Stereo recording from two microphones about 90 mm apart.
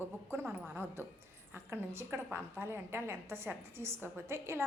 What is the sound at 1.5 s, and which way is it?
A woman's voice, 30° right (ahead or behind).